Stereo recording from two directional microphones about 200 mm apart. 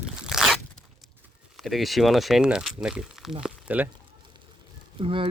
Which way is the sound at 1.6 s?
Centre (ahead or behind).